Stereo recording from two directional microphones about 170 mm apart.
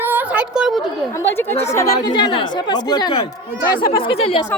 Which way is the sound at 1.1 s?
15° left (ahead or behind).